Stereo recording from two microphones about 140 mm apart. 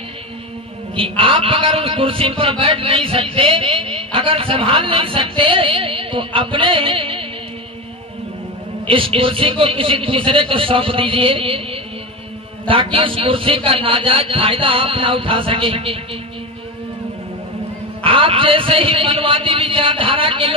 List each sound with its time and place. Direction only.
0.9 s a man's voice: 40° right (ahead or behind)
8.8 s a man's voice: 40° right (ahead or behind)
18.0 s a man's voice: 40° right (ahead or behind)